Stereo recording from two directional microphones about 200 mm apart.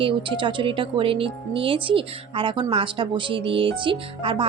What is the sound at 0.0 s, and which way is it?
Speech, 25° right (ahead or behind).